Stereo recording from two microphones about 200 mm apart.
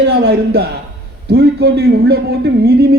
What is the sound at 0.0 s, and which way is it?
A man's voice, 55° right (ahead or behind).